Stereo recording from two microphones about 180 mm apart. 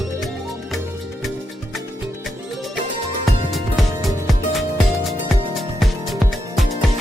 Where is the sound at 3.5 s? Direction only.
Centre (ahead or behind).